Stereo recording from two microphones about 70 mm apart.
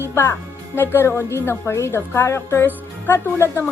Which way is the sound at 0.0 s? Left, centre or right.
Left.